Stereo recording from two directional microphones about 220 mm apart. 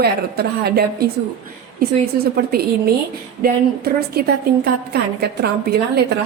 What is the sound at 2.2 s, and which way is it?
Speech, 45° right (ahead or behind).